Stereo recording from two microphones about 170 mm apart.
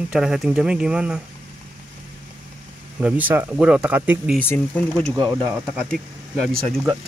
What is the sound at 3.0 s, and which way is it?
Speech, 10° right (ahead or behind).